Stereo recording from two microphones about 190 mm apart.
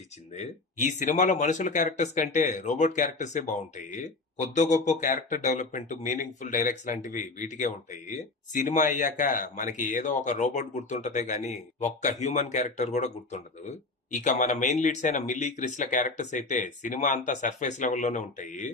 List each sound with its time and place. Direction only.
0.3 s speech: 35° left (ahead or behind)